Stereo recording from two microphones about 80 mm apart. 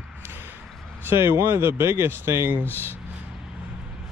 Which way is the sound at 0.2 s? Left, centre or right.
Right.